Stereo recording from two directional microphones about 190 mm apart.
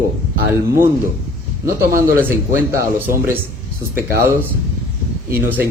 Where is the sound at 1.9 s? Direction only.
10° right (ahead or behind).